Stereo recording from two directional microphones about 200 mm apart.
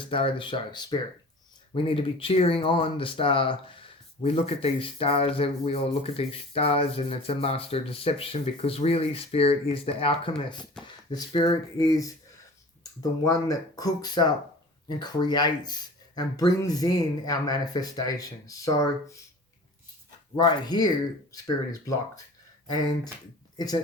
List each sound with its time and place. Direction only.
0.0 s speech: 25° left (ahead or behind)
20.3 s speech: 20° left (ahead or behind)